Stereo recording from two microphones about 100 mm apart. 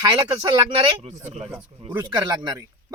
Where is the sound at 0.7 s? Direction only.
75° right (ahead or behind).